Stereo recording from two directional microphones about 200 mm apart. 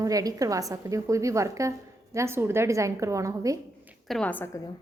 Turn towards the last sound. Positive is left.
turn(degrees=10)  # may be behind; listen again after turning